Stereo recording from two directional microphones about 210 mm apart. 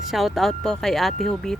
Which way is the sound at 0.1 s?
Centre (ahead or behind).